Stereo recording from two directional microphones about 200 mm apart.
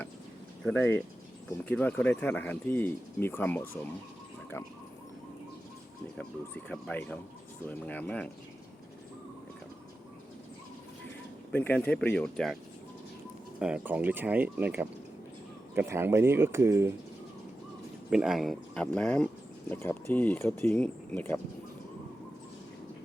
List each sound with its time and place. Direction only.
0.6 s speech: 10° left (ahead or behind)
6.1 s speech: 5° left (ahead or behind)
11.5 s speech: 10° left (ahead or behind)
13.6 s speech: 5° right (ahead or behind)
18.1 s speech: 5° right (ahead or behind)